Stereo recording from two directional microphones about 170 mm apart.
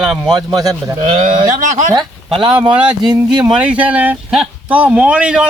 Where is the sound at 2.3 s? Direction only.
30° right (ahead or behind).